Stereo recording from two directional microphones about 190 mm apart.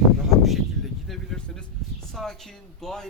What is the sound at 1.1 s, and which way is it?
Vehicle, centre (ahead or behind).